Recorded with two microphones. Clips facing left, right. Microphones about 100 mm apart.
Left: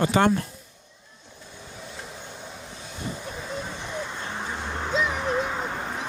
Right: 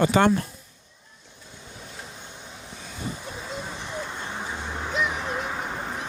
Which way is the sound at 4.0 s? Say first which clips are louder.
Left 1 dB; 5° right (ahead or behind).